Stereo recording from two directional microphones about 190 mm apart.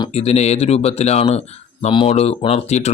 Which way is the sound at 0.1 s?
35° left (ahead or behind).